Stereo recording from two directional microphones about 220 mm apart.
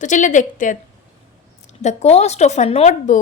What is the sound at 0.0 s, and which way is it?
Speech, 35° left (ahead or behind).